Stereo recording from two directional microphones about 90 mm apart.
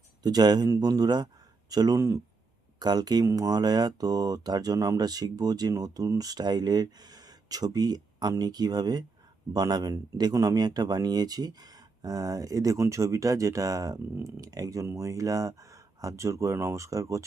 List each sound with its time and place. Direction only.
0.2 s speech: 50° right (ahead or behind)
2.7 s speech: 50° right (ahead or behind)